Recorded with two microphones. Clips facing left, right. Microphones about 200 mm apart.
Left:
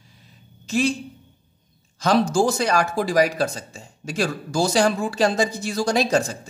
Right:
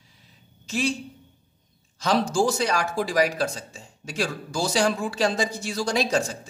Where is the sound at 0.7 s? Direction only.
45° left (ahead or behind).